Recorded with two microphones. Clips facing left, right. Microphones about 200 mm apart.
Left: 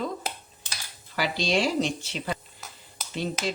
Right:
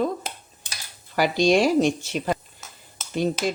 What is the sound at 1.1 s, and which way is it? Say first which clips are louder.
Speech: right 7 dB; 50° right (ahead or behind).